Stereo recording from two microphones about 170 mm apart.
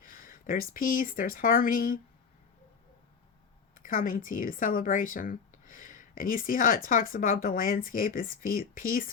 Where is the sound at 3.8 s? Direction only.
55° left (ahead or behind).